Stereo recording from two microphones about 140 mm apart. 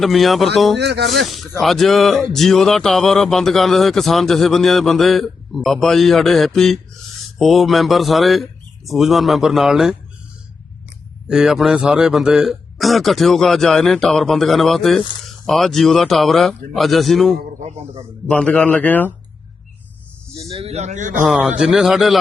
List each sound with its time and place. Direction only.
0.0 s a man's voice: centre (ahead or behind)
11.3 s a man's voice: 5° right (ahead or behind); by 19.1 s 10° left (ahead or behind)
20.4 s a man's voice: 45° right (ahead or behind); by 21.2 s 65° right (ahead or behind)
21.2 s a man's voice: 5° right (ahead or behind)